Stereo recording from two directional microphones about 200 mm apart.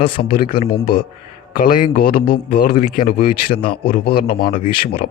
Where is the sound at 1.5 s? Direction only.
45° left (ahead or behind).